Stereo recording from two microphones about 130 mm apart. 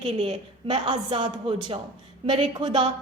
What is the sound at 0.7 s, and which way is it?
Speech, 35° right (ahead or behind).